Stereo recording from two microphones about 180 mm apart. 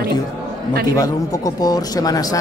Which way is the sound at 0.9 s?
20° left (ahead or behind).